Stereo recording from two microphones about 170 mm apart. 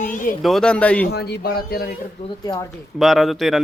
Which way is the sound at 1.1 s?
70° left (ahead or behind).